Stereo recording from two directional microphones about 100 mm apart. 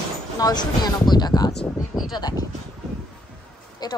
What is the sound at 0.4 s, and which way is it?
A woman's voice, 40° left (ahead or behind).